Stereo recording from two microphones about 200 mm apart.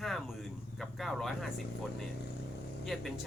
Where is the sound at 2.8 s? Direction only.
Centre (ahead or behind).